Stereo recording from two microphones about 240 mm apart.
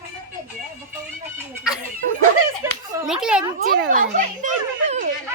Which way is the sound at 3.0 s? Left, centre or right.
Centre.